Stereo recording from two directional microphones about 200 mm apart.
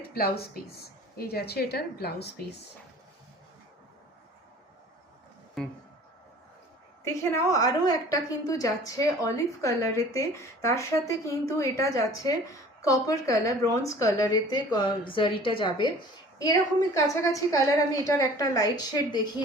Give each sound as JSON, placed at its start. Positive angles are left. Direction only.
{"t": 0.1, "sound": "speech", "side_deg": 50}
{"t": 5.6, "sound": "speech", "side_deg": 5}
{"t": 7.0, "sound": "a woman's voice", "side_deg": 15}